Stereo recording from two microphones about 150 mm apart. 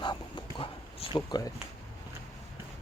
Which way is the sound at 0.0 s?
30° left (ahead or behind).